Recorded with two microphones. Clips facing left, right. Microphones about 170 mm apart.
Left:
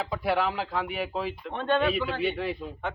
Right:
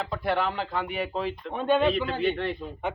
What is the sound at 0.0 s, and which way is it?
Speech, 5° left (ahead or behind).